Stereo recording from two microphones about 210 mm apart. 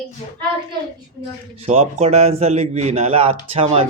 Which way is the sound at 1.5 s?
30° right (ahead or behind).